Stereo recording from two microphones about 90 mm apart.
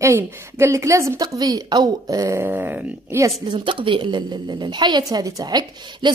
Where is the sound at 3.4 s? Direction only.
65° right (ahead or behind).